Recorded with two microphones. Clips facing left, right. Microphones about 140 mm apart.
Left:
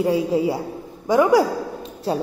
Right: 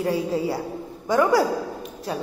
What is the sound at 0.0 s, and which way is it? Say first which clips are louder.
A woman's voice: left 4 dB; 15° left (ahead or behind).